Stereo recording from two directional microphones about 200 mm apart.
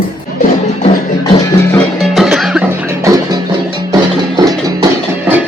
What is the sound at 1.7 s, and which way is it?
Music, centre (ahead or behind).